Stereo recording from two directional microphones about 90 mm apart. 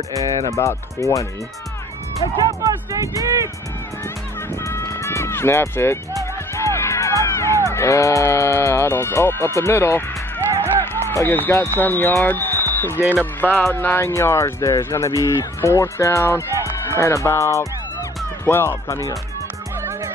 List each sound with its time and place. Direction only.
0.6 s speech: 35° left (ahead or behind)
2.6 s speech: 40° right (ahead or behind)
4.6 s music: 35° left (ahead or behind)
7.7 s speech: 35° left (ahead or behind)
10.8 s music: 25° left (ahead or behind)
11.5 s speech: 25° left (ahead or behind)
12.9 s speech: 25° right (ahead or behind)
13.4 s speech: 20° left (ahead or behind)